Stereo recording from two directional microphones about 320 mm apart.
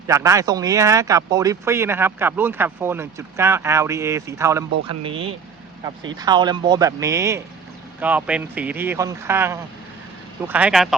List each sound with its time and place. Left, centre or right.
0.1 s speech: centre